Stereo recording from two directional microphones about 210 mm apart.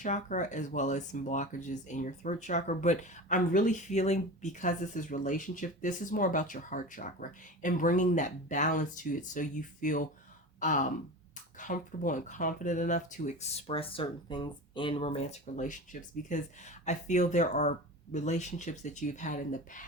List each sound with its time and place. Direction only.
0.0 s speech: 35° left (ahead or behind)
10.6 s gasp: 35° left (ahead or behind)
11.6 s speech: 40° left (ahead or behind)